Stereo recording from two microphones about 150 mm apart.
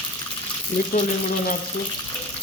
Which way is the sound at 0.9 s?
55° left (ahead or behind).